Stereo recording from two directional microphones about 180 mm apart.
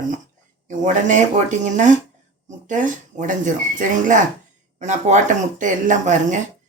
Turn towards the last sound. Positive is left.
turn(degrees=-45)  # may be behind; listen again after turning